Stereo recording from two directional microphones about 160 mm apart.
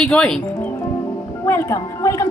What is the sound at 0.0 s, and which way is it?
A woman's voice, 5° left (ahead or behind).